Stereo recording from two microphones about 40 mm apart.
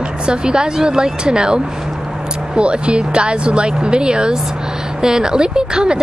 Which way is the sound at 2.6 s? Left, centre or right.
Right.